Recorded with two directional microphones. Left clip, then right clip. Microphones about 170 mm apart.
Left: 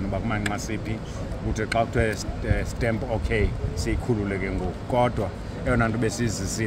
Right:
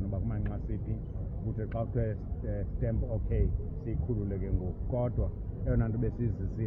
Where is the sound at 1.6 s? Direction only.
5° left (ahead or behind).